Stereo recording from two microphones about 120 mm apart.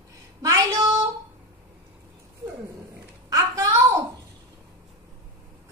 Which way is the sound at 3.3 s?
30° right (ahead or behind).